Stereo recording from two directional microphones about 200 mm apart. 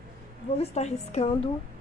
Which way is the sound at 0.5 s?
30° left (ahead or behind).